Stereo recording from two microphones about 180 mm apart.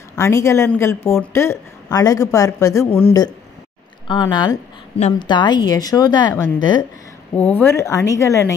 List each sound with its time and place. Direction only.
0.1 s a woman's voice: 15° left (ahead or behind)
7.5 s speech: 15° left (ahead or behind)